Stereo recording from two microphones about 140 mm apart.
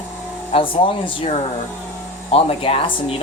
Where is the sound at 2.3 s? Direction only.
45° left (ahead or behind).